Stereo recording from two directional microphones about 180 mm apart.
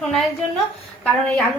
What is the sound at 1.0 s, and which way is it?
Speech, centre (ahead or behind).